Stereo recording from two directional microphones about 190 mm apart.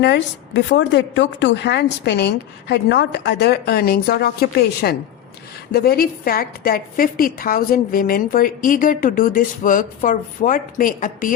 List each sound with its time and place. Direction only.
0.0 s a woman's voice: 65° left (ahead or behind); by 11.3 s 45° left (ahead or behind)